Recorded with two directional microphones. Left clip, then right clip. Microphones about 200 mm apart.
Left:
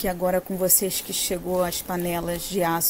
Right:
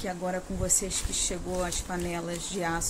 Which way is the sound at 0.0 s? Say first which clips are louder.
Left 9 dB; 40° left (ahead or behind).